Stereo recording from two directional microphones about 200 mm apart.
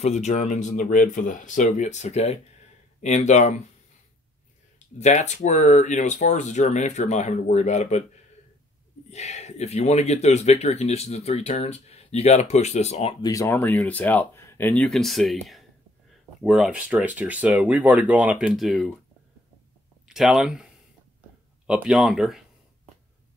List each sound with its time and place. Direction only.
0.0 s speech: 35° left (ahead or behind)
4.7 s speech: 35° left (ahead or behind)
9.1 s speech: 35° left (ahead or behind)
13.2 s speech: 15° left (ahead or behind); by 18.9 s centre (ahead or behind)
20.1 s speech: centre (ahead or behind)
21.6 s speech: 5° right (ahead or behind)